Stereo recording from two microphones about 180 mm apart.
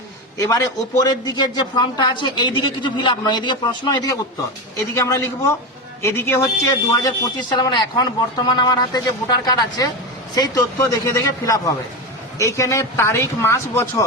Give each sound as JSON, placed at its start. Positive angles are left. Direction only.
{"t": 0.3, "sound": "a man's voice", "side_deg": 20}